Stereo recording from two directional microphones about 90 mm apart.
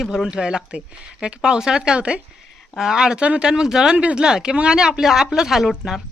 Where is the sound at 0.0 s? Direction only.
5° right (ahead or behind).